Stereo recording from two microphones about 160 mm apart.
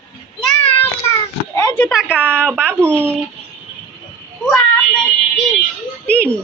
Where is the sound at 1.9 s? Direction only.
5° right (ahead or behind).